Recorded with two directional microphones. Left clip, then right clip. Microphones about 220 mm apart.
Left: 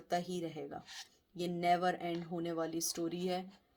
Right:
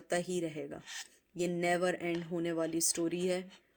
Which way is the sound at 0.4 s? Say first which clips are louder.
Right 4 dB; 40° right (ahead or behind).